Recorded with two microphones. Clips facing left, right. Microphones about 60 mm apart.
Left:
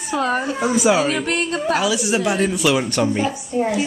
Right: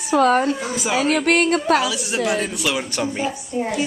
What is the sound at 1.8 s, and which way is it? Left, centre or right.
A woman's voice, centre.